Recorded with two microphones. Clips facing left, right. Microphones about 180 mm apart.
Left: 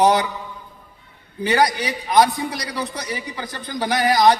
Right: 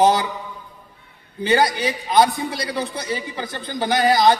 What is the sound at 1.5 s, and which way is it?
A man's voice, 25° right (ahead or behind).